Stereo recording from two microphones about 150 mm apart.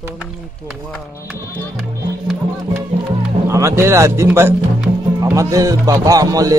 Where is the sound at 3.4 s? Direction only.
20° right (ahead or behind).